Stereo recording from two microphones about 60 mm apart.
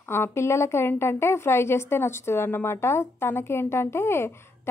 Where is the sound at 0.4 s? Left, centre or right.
Left.